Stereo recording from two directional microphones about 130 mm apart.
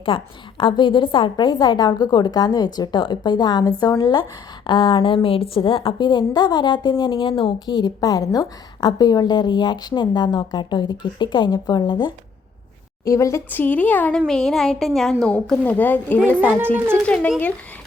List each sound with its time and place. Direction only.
0.0 s speech: 40° left (ahead or behind)
13.1 s a child's voice: 25° left (ahead or behind)
16.4 s a child's voice: 10° right (ahead or behind)